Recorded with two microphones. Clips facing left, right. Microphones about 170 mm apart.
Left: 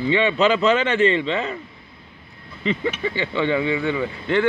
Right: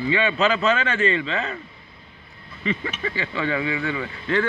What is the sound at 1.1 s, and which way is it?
Speech, 25° left (ahead or behind).